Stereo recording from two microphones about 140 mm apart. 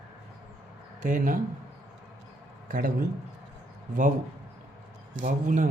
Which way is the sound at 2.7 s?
75° right (ahead or behind).